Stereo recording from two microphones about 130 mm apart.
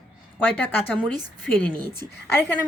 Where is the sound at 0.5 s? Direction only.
15° left (ahead or behind).